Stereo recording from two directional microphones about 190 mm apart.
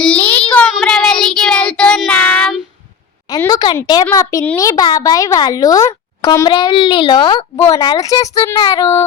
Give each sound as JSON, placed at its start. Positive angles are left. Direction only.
{"t": 0.0, "sound": "child singing", "side_deg": 10}
{"t": 3.2, "sound": "a child's voice", "side_deg": 20}